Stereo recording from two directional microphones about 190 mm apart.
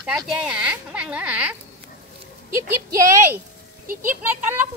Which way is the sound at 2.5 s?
15° right (ahead or behind).